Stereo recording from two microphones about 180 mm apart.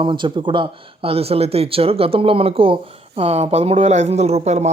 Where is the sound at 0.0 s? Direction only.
25° right (ahead or behind).